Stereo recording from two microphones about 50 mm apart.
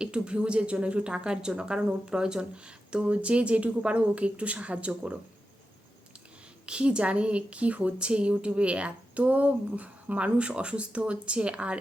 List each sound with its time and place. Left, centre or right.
0.0 s speech: centre
6.7 s speech: centre